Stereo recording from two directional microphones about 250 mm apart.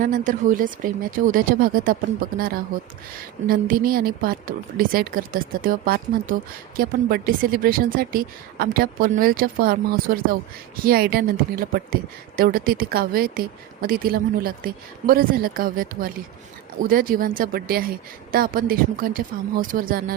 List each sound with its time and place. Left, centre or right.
0.0 s a woman's voice: right
3.4 s a woman's voice: right